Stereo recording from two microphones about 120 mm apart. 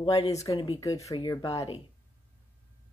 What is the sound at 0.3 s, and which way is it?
Speech, 30° left (ahead or behind).